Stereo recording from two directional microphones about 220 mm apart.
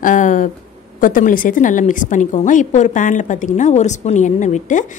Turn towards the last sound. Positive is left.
turn(degrees=35)  # may be behind; listen again after turning